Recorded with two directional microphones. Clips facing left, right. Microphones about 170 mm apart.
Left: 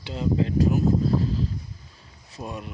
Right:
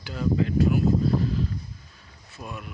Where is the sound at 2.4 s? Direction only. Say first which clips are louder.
Left 3 dB; 30° left (ahead or behind).